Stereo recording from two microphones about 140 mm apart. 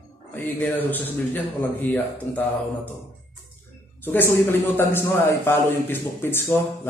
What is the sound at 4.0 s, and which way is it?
A man's voice, 15° left (ahead or behind).